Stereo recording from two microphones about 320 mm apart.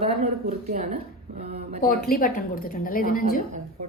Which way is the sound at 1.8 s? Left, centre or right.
Left.